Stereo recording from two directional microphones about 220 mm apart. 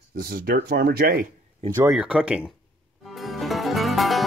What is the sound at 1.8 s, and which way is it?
Speech, 5° right (ahead or behind).